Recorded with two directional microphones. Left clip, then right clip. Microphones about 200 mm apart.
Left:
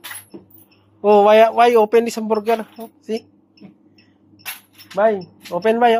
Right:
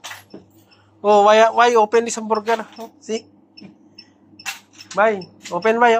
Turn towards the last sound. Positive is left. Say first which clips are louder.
# even
turn(degrees=30)  # may be behind; listen again after turning